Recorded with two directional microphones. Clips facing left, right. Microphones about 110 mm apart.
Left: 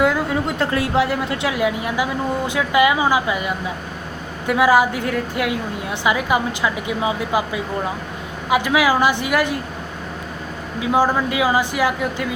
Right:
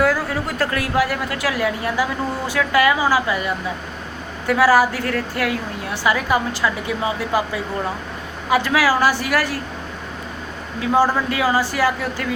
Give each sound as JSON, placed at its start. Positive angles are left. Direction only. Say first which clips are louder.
{"t": 0.0, "sound": "a woman's voice", "louder": "left 1 dB", "side_deg": 20}
{"t": 10.8, "sound": "a woman's voice", "louder": "even", "side_deg": 15}